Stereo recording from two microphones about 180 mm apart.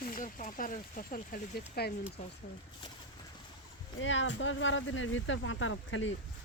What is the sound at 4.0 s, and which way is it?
Speech, 90° left.